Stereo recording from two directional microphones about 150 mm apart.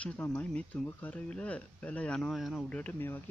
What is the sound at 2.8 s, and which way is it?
Speech, 10° left (ahead or behind).